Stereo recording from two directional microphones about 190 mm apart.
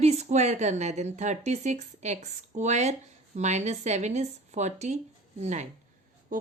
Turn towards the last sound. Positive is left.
turn(degrees=-45)  # may be behind; listen again after turning